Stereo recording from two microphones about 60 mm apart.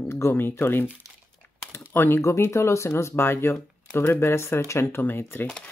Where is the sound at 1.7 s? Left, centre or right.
Left.